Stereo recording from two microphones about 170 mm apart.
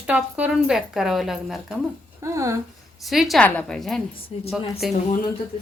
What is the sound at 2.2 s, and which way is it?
Speech, 15° right (ahead or behind).